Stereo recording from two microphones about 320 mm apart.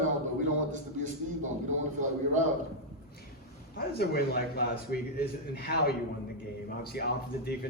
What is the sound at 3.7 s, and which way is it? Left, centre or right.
A man's voice, left.